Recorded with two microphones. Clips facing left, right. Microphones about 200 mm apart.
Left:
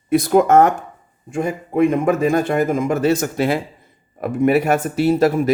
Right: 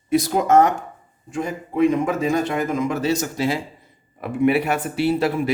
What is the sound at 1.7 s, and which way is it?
Speech, 55° left (ahead or behind).